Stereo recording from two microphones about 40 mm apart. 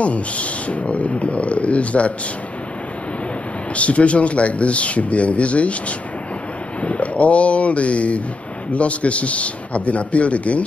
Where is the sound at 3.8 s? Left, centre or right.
Left.